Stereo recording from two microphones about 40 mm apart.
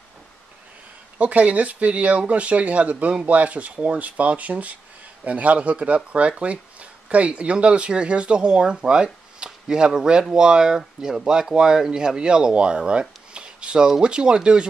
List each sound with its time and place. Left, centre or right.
1.1 s speech: right